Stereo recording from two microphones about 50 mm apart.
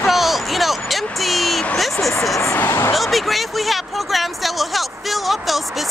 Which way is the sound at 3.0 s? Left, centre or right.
Centre.